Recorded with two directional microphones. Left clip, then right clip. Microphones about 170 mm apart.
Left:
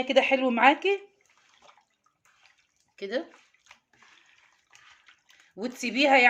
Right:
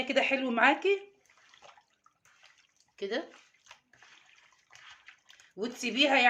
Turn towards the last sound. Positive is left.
turn(degrees=40)  # may be behind; listen again after turning